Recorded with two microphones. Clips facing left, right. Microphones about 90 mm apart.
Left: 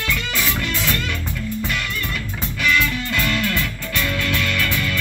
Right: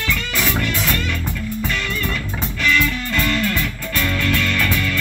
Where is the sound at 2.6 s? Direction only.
10° left (ahead or behind).